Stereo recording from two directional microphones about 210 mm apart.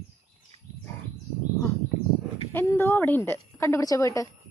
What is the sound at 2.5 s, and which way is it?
A woman's voice, 10° left (ahead or behind).